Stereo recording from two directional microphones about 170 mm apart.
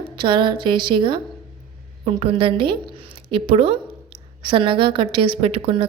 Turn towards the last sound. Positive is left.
turn(degrees=-35)  # may be behind; listen again after turning